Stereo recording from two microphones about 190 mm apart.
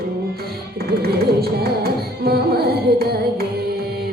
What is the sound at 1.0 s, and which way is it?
Music, 55° right (ahead or behind).